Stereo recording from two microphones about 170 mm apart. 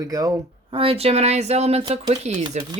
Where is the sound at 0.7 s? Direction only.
35° right (ahead or behind).